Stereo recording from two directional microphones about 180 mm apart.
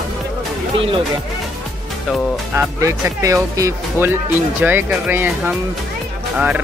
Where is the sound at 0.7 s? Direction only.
30° right (ahead or behind).